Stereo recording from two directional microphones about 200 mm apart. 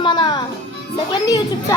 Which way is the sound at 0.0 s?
25° left (ahead or behind).